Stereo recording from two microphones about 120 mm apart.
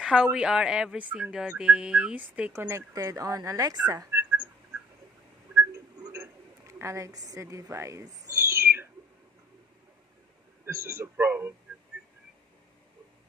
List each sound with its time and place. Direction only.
0.0 s speech: 5° right (ahead or behind); by 4.2 s 30° right (ahead or behind)
6.1 s a sound: 20° right (ahead or behind)
10.6 s speech: 20° right (ahead or behind)